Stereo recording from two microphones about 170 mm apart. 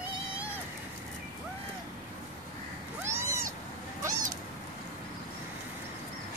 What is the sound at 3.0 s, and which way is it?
Cat, 15° right (ahead or behind).